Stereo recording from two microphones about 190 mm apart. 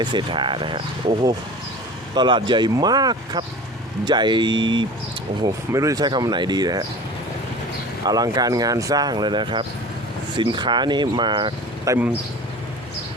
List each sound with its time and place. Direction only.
0.0 s speech: 25° right (ahead or behind)
8.0 s speech: 20° right (ahead or behind)